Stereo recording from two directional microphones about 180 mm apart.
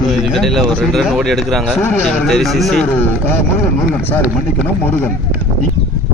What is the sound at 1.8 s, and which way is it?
Speech, 10° left (ahead or behind).